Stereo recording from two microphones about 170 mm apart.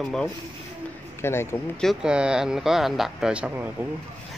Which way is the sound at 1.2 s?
15° left (ahead or behind).